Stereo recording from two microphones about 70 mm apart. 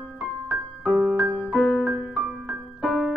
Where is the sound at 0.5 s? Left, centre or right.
Right.